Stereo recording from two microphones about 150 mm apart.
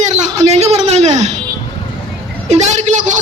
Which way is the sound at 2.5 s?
50° right (ahead or behind).